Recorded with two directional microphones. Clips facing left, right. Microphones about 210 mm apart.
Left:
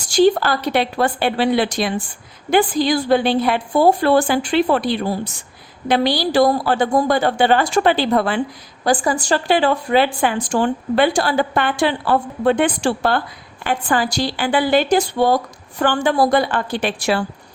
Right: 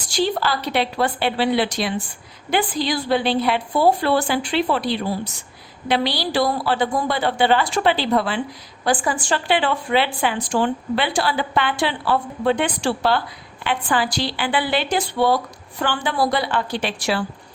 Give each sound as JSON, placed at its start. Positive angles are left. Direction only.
{"t": 0.1, "sound": "a woman's voice", "side_deg": 50}
{"t": 8.8, "sound": "a woman's voice", "side_deg": 40}